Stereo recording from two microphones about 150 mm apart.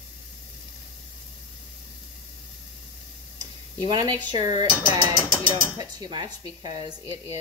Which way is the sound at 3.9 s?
25° right (ahead or behind).